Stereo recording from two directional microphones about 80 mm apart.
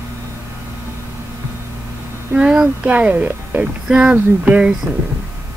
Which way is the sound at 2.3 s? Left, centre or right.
Centre.